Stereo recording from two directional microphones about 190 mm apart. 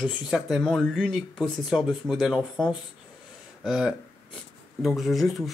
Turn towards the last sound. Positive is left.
turn(degrees=0)  # may be behind; listen again after turning